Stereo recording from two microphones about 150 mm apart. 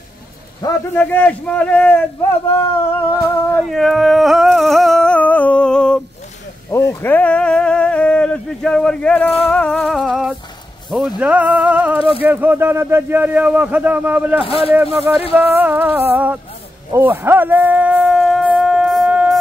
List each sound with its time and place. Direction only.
0.9 s speech: 10° left (ahead or behind)
3.1 s speech: 15° left (ahead or behind)
3.6 s a sound: centre (ahead or behind)
9.5 s music: 10° left (ahead or behind)
10.9 s speech: 5° right (ahead or behind)
14.4 s a man's voice: 40° left (ahead or behind)
15.0 s speech: 10° right (ahead or behind)
16.9 s shofar: 15° right (ahead or behind)